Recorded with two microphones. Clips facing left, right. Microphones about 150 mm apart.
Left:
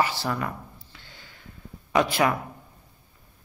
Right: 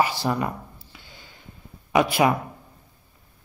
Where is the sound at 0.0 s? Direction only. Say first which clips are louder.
Right 3 dB; 15° right (ahead or behind).